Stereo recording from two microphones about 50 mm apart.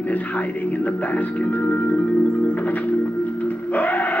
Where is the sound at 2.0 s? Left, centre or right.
Centre.